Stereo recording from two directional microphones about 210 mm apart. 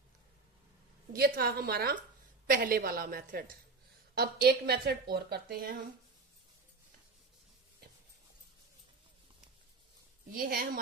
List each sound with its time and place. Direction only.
1.1 s a woman's voice: 45° right (ahead or behind)
10.3 s a woman's voice: 45° right (ahead or behind)